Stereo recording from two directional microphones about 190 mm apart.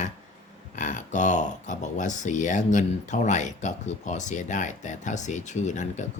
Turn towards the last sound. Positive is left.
turn(degrees=40)  # may be behind; listen again after turning